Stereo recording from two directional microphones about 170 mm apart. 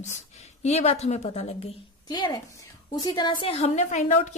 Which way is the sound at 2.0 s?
25° left (ahead or behind).